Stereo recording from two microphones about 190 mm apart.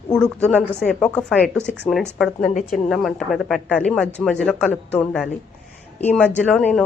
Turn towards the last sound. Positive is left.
turn(degrees=5)  # may be behind; listen again after turning